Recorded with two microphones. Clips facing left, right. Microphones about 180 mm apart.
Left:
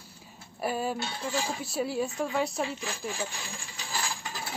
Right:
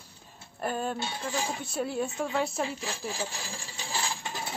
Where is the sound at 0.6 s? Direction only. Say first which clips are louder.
Left 1 dB; 5° left (ahead or behind).